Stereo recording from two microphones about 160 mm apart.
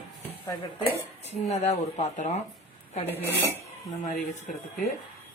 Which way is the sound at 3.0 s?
15° left (ahead or behind).